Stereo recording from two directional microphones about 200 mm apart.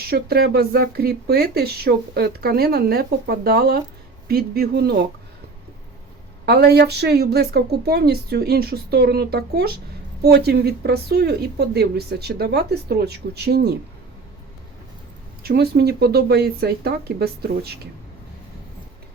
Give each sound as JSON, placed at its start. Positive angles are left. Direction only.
{"t": 0.0, "sound": "speech", "side_deg": -50}
{"t": 6.4, "sound": "speech", "side_deg": -55}
{"t": 15.4, "sound": "speech", "side_deg": -55}